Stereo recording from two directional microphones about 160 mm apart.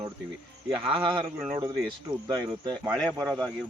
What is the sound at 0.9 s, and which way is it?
Speech, 35° right (ahead or behind).